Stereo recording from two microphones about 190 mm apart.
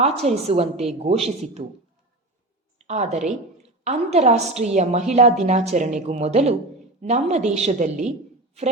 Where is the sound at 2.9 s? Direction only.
35° right (ahead or behind).